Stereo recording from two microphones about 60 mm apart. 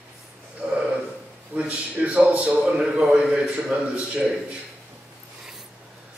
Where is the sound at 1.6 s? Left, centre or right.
Centre.